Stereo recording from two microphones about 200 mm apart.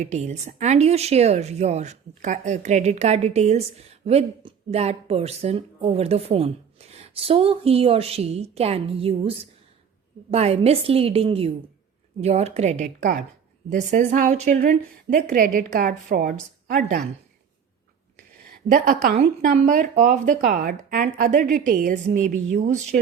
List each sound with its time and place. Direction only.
0.0 s a woman's voice: 35° right (ahead or behind)
18.5 s a woman's voice: 45° right (ahead or behind)
19.1 s a woman's voice: 30° right (ahead or behind)